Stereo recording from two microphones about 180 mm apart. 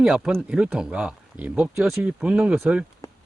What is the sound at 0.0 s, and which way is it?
Speech, centre (ahead or behind).